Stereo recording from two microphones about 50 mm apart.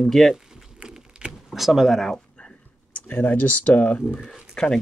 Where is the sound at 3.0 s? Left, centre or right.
Left.